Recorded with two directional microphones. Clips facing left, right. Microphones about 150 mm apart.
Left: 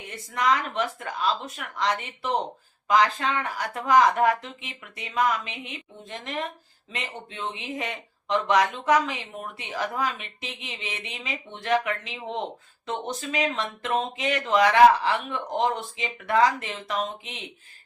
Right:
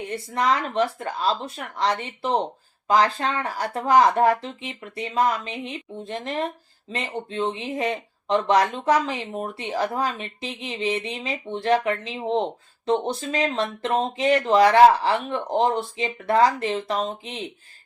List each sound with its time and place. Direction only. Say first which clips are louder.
0.1 s speech: right 1 dB; 30° right (ahead or behind)